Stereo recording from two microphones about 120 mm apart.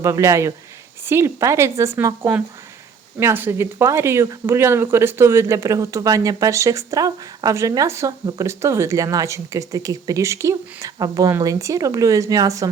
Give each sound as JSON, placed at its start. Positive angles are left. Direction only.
{"t": 0.0, "sound": "speech", "side_deg": -25}